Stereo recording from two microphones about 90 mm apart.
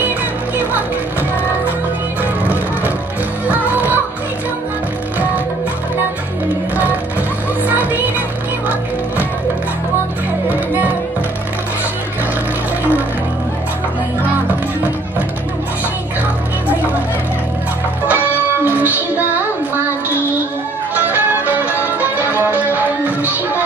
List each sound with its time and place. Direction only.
3.4 s music: 20° right (ahead or behind)
7.6 s music: 20° right (ahead or behind)
18.0 s music: 20° right (ahead or behind)
20.9 s music: 20° right (ahead or behind)